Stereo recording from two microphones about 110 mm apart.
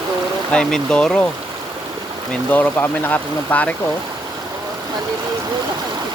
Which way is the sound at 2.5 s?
15° left (ahead or behind).